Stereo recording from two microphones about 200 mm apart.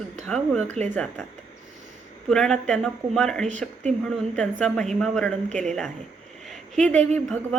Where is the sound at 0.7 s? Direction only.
35° right (ahead or behind).